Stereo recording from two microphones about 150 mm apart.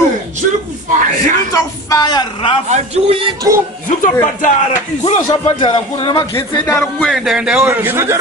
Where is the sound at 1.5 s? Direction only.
25° left (ahead or behind).